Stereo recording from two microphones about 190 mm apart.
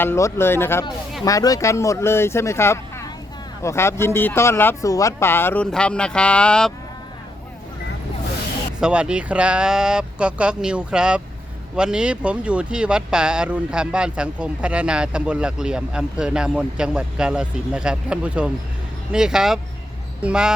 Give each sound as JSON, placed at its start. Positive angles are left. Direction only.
{"t": 0.0, "sound": "speech", "side_deg": 15}
{"t": 8.8, "sound": "speech", "side_deg": -5}